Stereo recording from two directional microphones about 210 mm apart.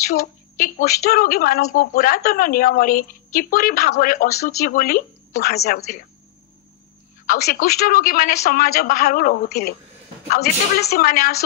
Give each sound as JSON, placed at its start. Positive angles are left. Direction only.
{"t": 0.2, "sound": "a woman's voice", "side_deg": 45}
{"t": 7.2, "sound": "a woman's voice", "side_deg": 45}